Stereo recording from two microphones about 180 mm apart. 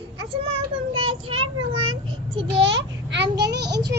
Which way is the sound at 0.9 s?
30° right (ahead or behind).